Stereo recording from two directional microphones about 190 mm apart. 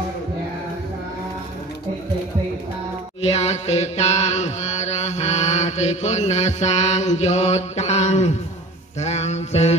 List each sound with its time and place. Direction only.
3.2 s chant: 35° left (ahead or behind)
9.0 s mantra: 35° left (ahead or behind)